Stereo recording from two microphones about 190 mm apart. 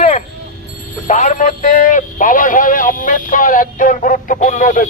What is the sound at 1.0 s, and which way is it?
Speech, 40° left (ahead or behind).